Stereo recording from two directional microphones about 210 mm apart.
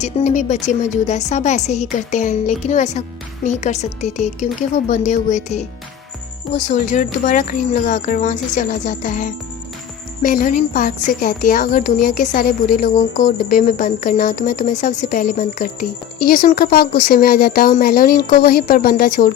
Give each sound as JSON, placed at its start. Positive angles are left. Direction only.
{"t": 0.0, "sound": "speech", "side_deg": 35}